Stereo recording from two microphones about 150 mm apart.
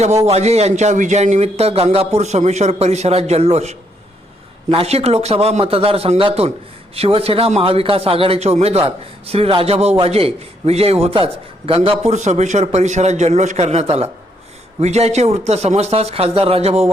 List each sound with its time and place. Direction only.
0.0 s a man's voice: 45° right (ahead or behind)